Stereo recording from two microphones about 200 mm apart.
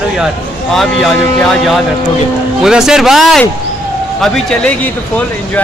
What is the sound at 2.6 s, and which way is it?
Speech, 5° right (ahead or behind).